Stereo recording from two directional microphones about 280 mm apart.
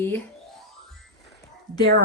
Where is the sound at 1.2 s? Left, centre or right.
Centre.